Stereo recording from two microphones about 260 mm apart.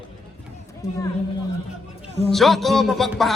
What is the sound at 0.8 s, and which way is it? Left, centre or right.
Speech, centre.